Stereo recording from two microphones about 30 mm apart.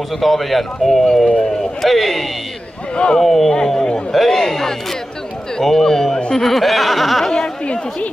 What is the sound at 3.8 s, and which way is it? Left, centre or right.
Speech, left.